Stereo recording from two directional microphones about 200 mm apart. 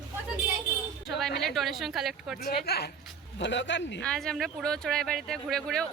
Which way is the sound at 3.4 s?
65° left (ahead or behind).